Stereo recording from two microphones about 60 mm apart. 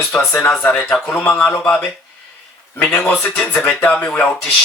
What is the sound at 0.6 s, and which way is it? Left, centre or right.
Speech, centre.